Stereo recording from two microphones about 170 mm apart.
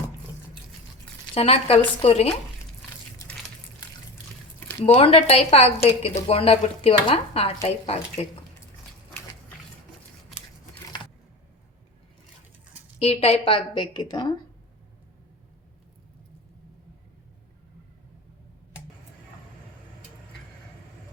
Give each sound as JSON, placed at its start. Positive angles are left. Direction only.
{"t": 1.3, "sound": "a woman's voice", "side_deg": 35}
{"t": 4.9, "sound": "a woman's voice", "side_deg": 35}
{"t": 13.0, "sound": "a woman's voice", "side_deg": 35}